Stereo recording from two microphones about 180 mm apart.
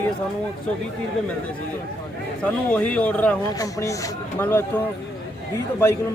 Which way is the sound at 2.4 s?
5° left (ahead or behind).